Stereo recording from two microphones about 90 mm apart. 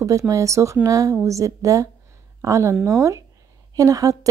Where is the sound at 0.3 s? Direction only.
35° right (ahead or behind).